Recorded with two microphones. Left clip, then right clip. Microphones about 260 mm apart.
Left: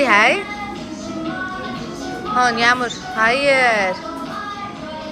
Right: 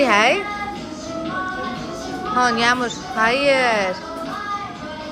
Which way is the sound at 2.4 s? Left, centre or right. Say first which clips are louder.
Left 2 dB; centre.